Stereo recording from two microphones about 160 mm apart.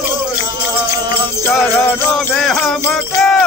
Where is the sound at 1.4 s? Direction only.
15° left (ahead or behind).